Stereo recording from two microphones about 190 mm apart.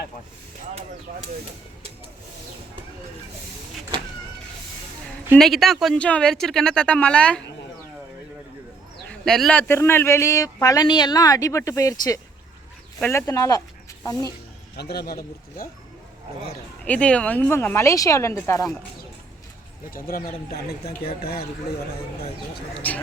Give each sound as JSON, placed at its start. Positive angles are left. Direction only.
{"t": 5.3, "sound": "speech", "side_deg": 0}
{"t": 9.0, "sound": "speech", "side_deg": 0}
{"t": 14.8, "sound": "speech", "side_deg": 55}
{"t": 16.8, "sound": "speech", "side_deg": 5}
{"t": 19.9, "sound": "speech", "side_deg": 50}
{"t": 22.8, "sound": "speech", "side_deg": 10}